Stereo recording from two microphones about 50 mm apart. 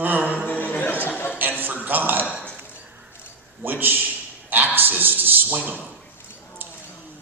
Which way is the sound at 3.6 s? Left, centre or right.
Right.